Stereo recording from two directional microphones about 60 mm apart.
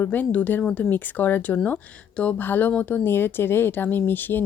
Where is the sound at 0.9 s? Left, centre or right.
Left.